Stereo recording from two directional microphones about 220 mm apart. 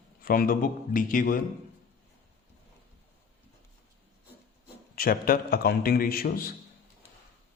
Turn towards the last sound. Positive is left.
turn(degrees=40)  # may be behind; listen again after turning